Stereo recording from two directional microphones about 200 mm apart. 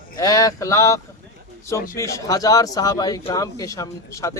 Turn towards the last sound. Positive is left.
turn(degrees=15)  # may be behind; listen again after turning